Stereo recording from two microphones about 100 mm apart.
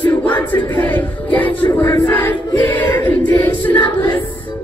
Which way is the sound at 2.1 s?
15° left (ahead or behind).